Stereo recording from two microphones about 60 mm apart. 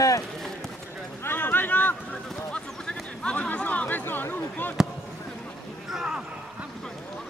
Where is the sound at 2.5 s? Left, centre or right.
Centre.